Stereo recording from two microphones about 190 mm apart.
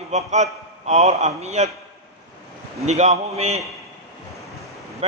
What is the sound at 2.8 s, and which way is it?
Speech, 35° right (ahead or behind).